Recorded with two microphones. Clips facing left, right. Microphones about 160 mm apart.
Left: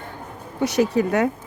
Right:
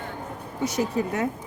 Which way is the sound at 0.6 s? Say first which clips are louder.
Left 6 dB; 75° left (ahead or behind).